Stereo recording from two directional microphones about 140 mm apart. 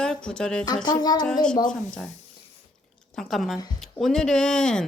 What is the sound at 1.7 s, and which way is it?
Speech, 5° left (ahead or behind).